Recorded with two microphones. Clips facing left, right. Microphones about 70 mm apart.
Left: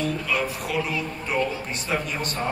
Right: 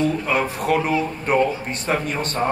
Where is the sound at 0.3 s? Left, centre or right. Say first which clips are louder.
Right 6 dB; right.